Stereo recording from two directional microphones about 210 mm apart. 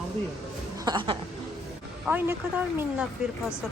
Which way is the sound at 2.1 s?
10° right (ahead or behind).